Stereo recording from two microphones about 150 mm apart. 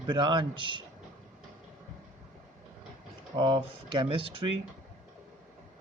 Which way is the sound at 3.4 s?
30° right (ahead or behind).